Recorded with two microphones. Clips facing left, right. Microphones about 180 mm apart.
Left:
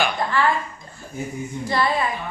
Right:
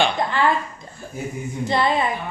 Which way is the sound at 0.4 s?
20° right (ahead or behind).